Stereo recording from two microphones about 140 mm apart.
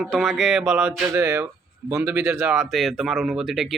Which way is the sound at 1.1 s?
15° right (ahead or behind).